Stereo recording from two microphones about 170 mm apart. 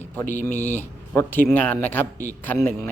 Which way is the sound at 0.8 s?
15° left (ahead or behind).